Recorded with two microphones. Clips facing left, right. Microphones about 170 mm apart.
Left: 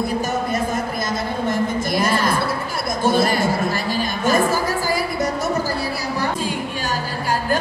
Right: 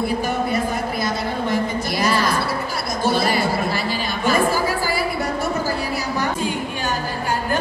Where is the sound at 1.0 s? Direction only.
50° left (ahead or behind).